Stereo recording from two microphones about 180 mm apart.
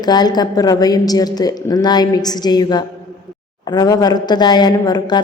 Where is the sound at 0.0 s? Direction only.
20° left (ahead or behind).